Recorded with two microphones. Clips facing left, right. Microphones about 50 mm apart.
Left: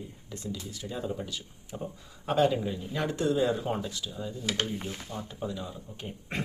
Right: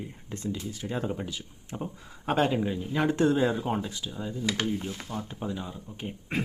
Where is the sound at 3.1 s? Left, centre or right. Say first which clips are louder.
Right 3 dB; right.